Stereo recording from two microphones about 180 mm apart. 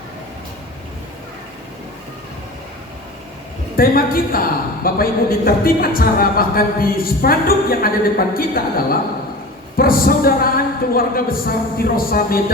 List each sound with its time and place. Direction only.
3.8 s a woman's voice: 55° left (ahead or behind)